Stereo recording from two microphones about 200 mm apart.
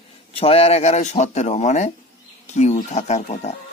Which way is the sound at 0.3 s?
30° left (ahead or behind).